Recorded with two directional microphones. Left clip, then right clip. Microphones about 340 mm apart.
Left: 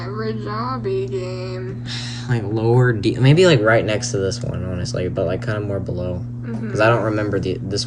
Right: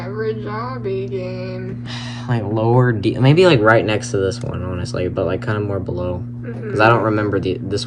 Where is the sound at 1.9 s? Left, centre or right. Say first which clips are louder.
Right 1 dB; centre.